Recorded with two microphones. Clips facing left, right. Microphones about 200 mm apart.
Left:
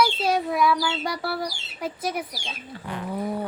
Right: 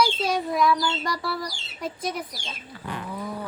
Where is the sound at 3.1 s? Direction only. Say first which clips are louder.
Left 8 dB; 30° left (ahead or behind).